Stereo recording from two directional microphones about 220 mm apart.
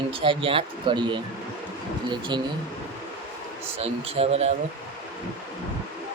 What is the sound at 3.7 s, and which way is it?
Speech, 25° right (ahead or behind).